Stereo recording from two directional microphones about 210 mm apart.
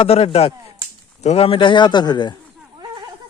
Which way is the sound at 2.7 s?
20° right (ahead or behind).